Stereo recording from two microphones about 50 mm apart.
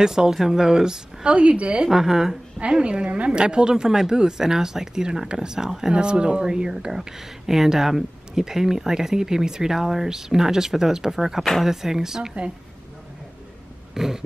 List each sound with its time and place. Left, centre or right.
0.0 s speech: centre
1.9 s speech: centre
2.6 s speech: right
13.9 s dog: centre